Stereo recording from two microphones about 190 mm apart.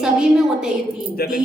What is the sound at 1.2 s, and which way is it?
Speech, 55° left (ahead or behind).